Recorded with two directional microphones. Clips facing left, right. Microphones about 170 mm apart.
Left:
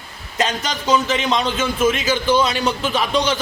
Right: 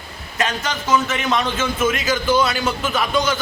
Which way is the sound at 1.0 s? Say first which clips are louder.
Left 1 dB; 30° left (ahead or behind).